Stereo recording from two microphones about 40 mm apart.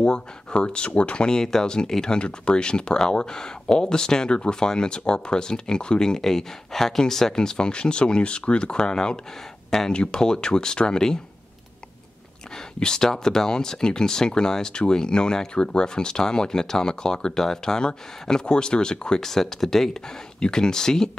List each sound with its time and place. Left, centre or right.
0.0 s speech: left
12.8 s speech: centre
20.3 s speech: left